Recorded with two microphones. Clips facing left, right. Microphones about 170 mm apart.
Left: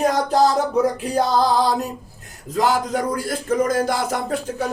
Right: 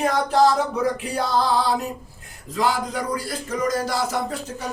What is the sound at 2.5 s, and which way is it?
Speech, 45° left (ahead or behind).